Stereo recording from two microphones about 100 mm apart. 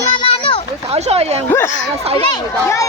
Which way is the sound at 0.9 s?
90° right.